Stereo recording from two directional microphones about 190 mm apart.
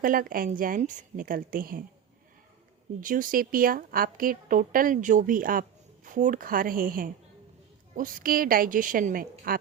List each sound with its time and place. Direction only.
0.0 s a woman's voice: 50° right (ahead or behind)
3.0 s a woman's voice: 45° right (ahead or behind)